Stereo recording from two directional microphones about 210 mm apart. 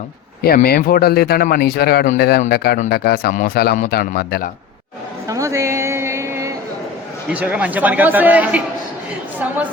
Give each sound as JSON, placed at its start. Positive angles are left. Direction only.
{"t": 0.4, "sound": "speech", "side_deg": 45}
{"t": 5.3, "sound": "a sound", "side_deg": -15}
{"t": 7.3, "sound": "speech", "side_deg": -5}